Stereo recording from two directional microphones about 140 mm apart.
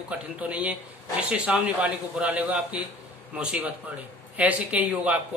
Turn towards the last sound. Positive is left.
turn(degrees=-10)  # may be behind; listen again after turning